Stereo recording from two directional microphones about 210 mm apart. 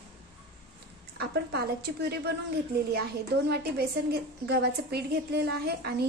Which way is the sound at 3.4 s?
50° right (ahead or behind).